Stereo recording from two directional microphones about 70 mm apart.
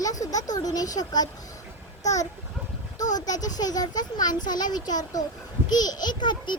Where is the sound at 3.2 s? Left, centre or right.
Left.